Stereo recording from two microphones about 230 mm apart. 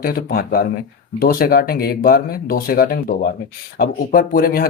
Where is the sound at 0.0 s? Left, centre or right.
Left.